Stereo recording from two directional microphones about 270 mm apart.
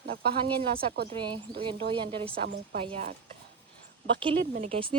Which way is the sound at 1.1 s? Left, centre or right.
Centre.